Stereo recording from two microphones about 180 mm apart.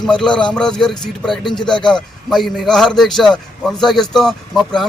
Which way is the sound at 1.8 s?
5° left (ahead or behind).